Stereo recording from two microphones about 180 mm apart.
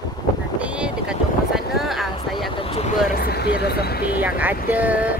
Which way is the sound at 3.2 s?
60° left (ahead or behind).